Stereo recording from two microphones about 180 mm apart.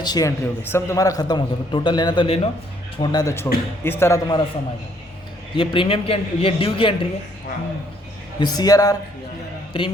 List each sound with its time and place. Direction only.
0.0 s a man's voice: 20° left (ahead or behind)
3.0 s a man's voice: 20° left (ahead or behind)
5.5 s a man's voice: 30° left (ahead or behind)
8.4 s a man's voice: 20° left (ahead or behind)